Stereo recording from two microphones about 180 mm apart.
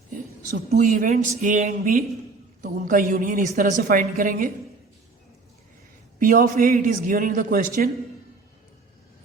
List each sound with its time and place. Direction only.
0.7 s a woman's voice: 45° right (ahead or behind)
6.1 s a woman's voice: 45° right (ahead or behind)